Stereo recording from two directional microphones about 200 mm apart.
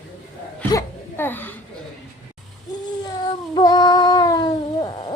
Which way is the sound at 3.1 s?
20° left (ahead or behind).